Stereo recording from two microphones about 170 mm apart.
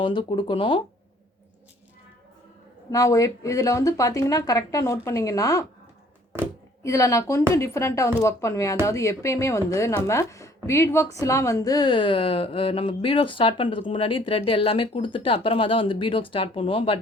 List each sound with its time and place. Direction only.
0.0 s speech: 30° left (ahead or behind)
2.9 s speech: 20° left (ahead or behind)
6.8 s speech: 20° left (ahead or behind)